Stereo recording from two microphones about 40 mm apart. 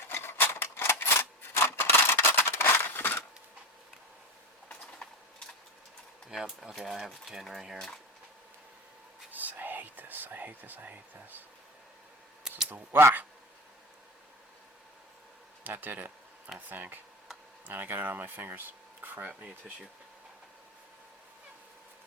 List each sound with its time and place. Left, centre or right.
0.1 s scissors: left
5.0 s a sound: left
6.2 s speech: centre
9.3 s whispering: right
12.6 s speech: right
15.6 s speech: right